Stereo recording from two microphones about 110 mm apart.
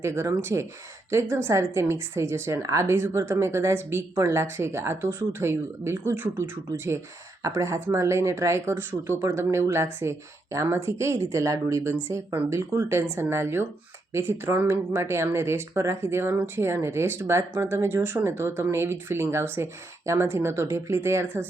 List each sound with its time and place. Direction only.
0.0 s a woman's voice: 25° right (ahead or behind)